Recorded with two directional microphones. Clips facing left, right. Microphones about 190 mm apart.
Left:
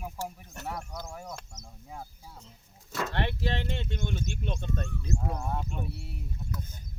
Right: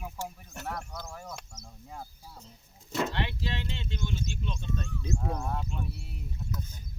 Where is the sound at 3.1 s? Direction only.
55° left (ahead or behind).